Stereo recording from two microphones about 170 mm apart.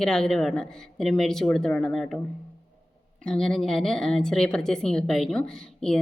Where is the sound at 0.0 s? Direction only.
Centre (ahead or behind).